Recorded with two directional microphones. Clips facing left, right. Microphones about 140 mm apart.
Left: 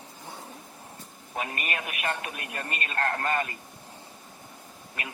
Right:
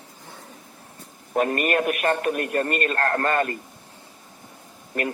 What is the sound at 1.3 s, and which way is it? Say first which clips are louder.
A man's voice: right 12 dB; 50° right (ahead or behind).